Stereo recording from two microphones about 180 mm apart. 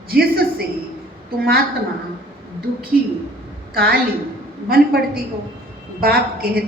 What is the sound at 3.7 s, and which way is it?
A woman's voice, 55° right (ahead or behind).